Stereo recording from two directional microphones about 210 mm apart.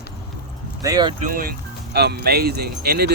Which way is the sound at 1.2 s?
40° right (ahead or behind).